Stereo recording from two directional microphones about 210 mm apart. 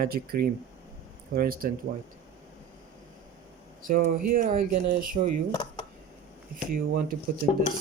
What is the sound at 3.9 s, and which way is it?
Speech, 40° right (ahead or behind).